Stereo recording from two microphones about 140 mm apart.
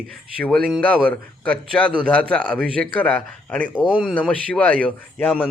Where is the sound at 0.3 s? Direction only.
5° left (ahead or behind).